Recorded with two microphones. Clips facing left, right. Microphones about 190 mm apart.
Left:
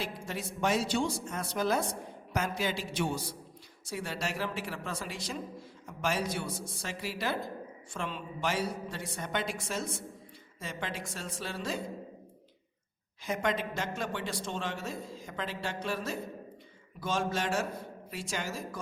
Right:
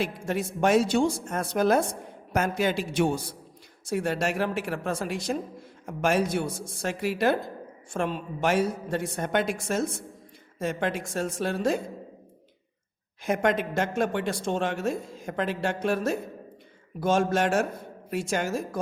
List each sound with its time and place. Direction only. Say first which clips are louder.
0.0 s a woman's voice: right 9 dB; 50° right (ahead or behind)
13.2 s a woman's voice: right 7 dB; 50° right (ahead or behind)